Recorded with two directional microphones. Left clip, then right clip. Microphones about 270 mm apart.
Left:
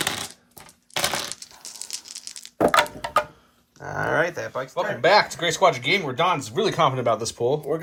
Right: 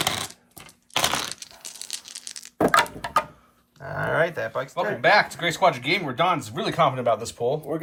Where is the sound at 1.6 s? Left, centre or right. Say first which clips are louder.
Even; centre.